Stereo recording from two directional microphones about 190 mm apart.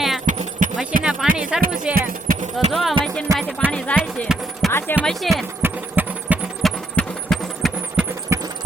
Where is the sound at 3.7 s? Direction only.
5° left (ahead or behind).